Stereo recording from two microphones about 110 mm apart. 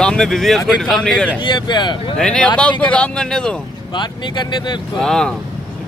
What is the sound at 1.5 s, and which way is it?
Speech, 45° left (ahead or behind).